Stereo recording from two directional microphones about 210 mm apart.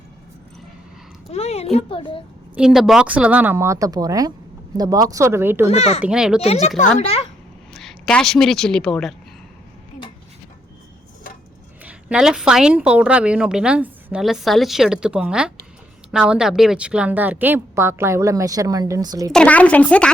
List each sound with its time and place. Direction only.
1.3 s a child's voice: 30° left (ahead or behind)
2.6 s a woman's voice: centre (ahead or behind)
5.6 s a child's voice: 30° left (ahead or behind)
6.0 s a woman's voice: 5° right (ahead or behind)
6.4 s speech: 30° left (ahead or behind)
7.7 s a woman's voice: centre (ahead or behind)
11.8 s a woman's voice: 5° right (ahead or behind)
19.3 s a woman's voice: 5° left (ahead or behind)